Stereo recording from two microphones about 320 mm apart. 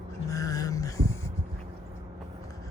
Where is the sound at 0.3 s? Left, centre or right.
Centre.